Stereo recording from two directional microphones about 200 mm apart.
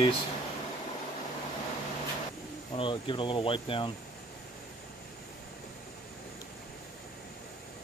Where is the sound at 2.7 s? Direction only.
25° left (ahead or behind).